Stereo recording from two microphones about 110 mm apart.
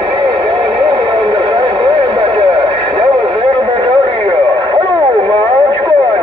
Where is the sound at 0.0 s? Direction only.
45° right (ahead or behind).